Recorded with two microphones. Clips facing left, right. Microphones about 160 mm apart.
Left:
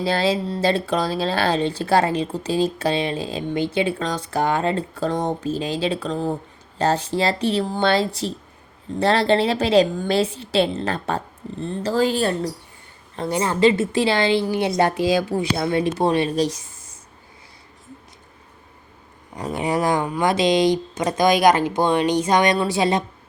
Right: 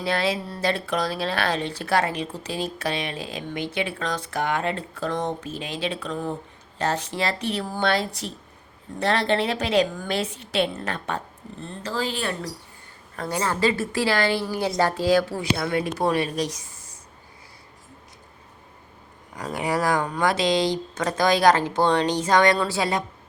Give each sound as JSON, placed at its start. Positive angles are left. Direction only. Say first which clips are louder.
{"t": 0.0, "sound": "speech", "louder": "left 4 dB", "side_deg": 30}
{"t": 12.2, "sound": "a woman's voice", "louder": "left 7 dB", "side_deg": 30}
{"t": 19.4, "sound": "a woman's voice", "louder": "left 3 dB", "side_deg": 25}